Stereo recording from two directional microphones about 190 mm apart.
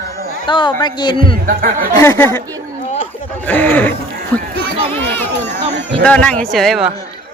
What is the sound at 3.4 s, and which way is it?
A man's voice, 10° left (ahead or behind).